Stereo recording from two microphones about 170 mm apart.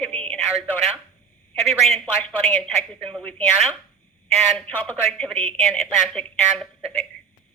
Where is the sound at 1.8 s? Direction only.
Centre (ahead or behind).